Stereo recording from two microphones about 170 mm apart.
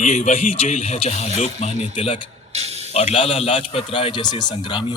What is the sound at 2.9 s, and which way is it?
Speech, 35° left (ahead or behind).